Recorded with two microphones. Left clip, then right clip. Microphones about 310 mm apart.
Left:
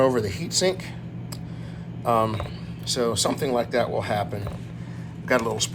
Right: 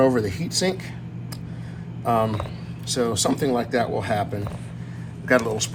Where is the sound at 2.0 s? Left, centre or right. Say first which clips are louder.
Even; centre.